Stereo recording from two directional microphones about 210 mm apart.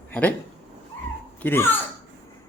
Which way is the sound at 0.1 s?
5° left (ahead or behind).